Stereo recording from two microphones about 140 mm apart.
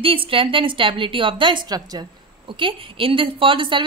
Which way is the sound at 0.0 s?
40° right (ahead or behind).